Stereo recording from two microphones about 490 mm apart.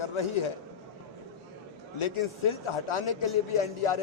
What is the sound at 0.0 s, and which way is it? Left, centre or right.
Speech, left.